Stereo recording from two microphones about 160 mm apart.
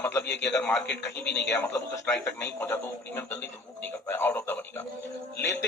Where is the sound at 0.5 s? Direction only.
5° left (ahead or behind).